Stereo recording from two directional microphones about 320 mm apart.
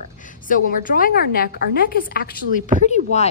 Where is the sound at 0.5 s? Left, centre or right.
Left.